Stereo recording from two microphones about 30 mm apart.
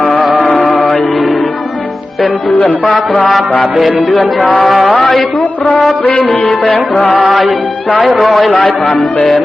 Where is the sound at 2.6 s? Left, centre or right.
Left.